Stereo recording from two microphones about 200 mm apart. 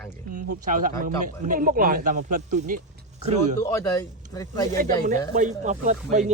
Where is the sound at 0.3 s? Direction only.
40° right (ahead or behind).